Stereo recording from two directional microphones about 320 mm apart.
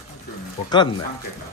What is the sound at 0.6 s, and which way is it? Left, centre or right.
Speech, centre.